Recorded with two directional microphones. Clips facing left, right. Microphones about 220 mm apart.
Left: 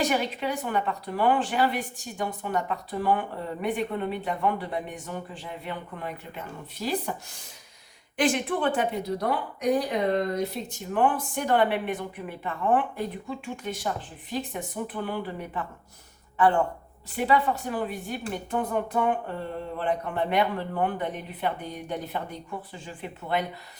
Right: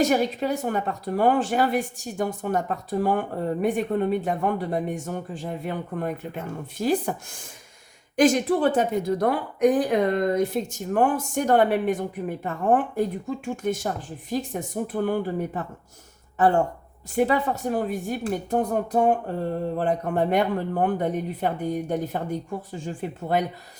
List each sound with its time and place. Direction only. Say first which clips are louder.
0.0 s a woman's voice: right 5 dB; 40° right (ahead or behind)